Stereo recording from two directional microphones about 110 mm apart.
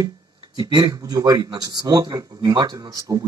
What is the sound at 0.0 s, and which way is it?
Speech, 40° right (ahead or behind).